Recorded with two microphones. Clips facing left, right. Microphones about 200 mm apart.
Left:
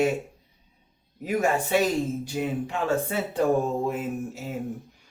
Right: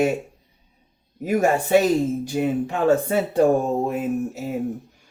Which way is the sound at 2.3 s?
45° right (ahead or behind).